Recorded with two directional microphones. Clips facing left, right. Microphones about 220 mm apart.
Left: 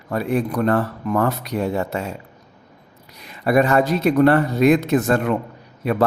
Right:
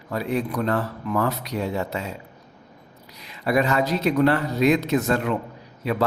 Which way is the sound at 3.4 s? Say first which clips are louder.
Left 5 dB; 50° left (ahead or behind).